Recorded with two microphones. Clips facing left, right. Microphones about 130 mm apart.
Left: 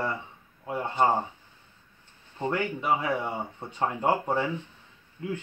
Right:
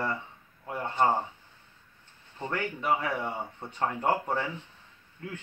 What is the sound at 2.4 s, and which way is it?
Speech, 15° left (ahead or behind).